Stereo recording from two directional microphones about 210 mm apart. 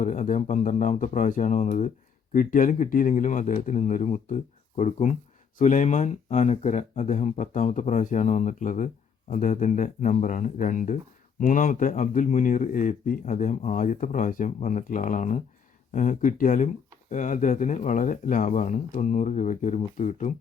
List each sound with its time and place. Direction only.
0.0 s speech: 35° left (ahead or behind)